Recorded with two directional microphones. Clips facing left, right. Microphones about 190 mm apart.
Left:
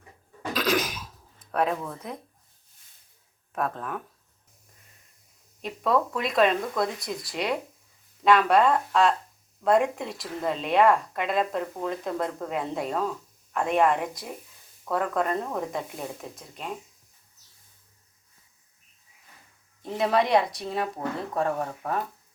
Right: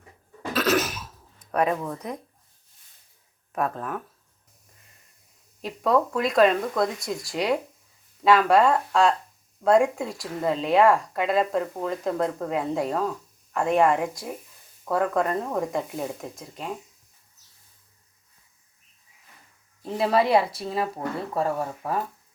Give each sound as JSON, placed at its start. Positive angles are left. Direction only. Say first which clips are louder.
{"t": 0.5, "sound": "cough", "louder": "right 3 dB", "side_deg": -5}
{"t": 1.4, "sound": "speech", "louder": "right 2 dB", "side_deg": 0}
{"t": 3.5, "sound": "speech", "louder": "right 2 dB", "side_deg": -5}
{"t": 5.6, "sound": "speech", "louder": "right 2 dB", "side_deg": 0}
{"t": 19.8, "sound": "speech", "louder": "right 2 dB", "side_deg": 0}